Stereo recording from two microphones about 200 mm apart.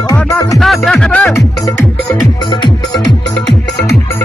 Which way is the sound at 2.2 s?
20° left (ahead or behind).